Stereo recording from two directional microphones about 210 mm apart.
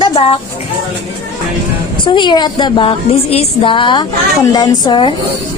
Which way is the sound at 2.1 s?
20° left (ahead or behind).